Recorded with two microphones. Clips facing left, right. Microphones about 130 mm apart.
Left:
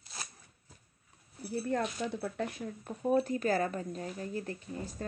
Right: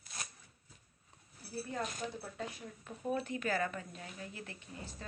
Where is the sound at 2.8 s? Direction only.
40° left (ahead or behind).